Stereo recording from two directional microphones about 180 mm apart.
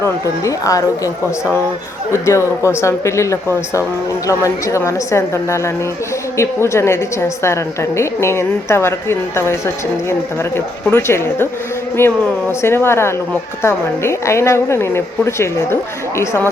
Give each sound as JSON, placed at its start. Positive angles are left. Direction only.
{"t": 0.0, "sound": "a woman's voice", "side_deg": 20}